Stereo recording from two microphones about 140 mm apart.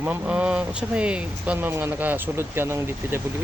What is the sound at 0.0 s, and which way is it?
Speech, 10° right (ahead or behind).